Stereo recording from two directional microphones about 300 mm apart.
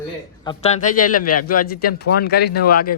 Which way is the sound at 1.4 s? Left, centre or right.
Left.